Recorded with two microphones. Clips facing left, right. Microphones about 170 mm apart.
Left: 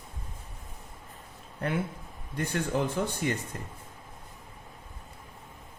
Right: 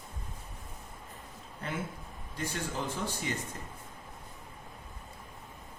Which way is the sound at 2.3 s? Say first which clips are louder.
Left 7 dB; 60° left (ahead or behind).